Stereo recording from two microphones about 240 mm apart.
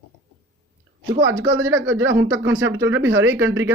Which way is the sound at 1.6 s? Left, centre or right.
Centre.